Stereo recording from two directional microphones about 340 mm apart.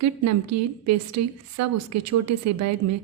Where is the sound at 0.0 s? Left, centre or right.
Right.